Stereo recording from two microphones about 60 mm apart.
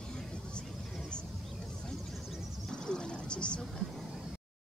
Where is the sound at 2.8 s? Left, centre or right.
Centre.